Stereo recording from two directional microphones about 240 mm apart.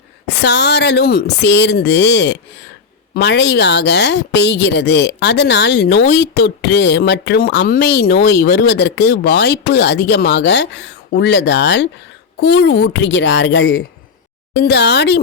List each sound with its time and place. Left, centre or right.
0.3 s a woman's voice: left